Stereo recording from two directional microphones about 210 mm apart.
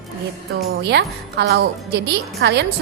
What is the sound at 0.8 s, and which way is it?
A woman's voice, 55° right (ahead or behind).